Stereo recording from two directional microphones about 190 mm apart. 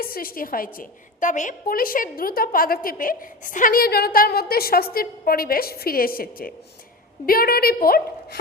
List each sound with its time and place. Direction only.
0.0 s a woman's voice: 50° left (ahead or behind)